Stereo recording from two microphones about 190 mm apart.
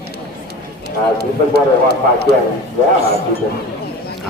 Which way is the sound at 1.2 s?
55° right (ahead or behind).